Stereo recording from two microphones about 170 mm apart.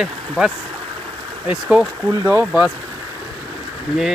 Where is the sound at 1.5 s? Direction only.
5° right (ahead or behind).